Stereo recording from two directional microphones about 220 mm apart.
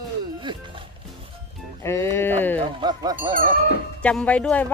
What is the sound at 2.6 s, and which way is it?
Speech, 20° right (ahead or behind).